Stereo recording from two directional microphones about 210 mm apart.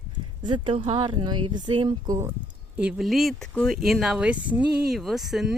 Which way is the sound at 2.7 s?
5° right (ahead or behind).